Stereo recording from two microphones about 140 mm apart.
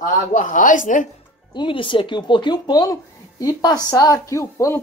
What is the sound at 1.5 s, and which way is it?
A woman's voice, 35° left (ahead or behind).